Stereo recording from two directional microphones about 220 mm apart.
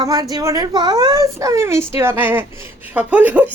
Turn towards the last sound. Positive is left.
turn(degrees=-5)  # may be behind; listen again after turning